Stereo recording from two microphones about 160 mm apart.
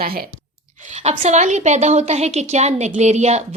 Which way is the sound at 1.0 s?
45° right (ahead or behind).